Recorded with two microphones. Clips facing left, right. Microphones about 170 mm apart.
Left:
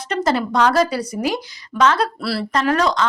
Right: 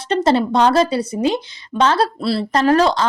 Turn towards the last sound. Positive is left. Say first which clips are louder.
# right 4 dB
turn(degrees=-30)  # may be behind; listen again after turning